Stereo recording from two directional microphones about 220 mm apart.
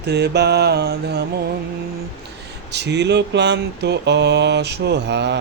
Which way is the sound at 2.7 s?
50° right (ahead or behind).